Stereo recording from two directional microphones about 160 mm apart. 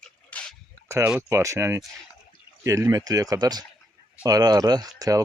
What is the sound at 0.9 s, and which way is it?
Speech, 15° right (ahead or behind).